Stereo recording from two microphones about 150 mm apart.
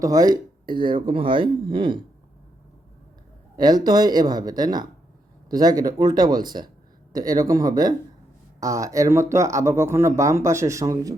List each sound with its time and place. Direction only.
0.0 s speech: 25° right (ahead or behind)
3.6 s speech: 25° right (ahead or behind)